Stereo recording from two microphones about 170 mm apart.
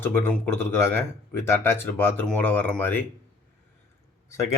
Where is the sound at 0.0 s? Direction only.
10° left (ahead or behind).